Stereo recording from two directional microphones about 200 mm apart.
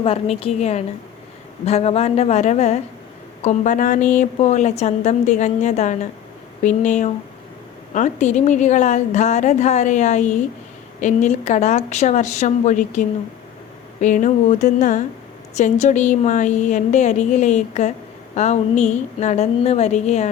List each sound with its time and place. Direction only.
0.0 s a woman's voice: 30° left (ahead or behind)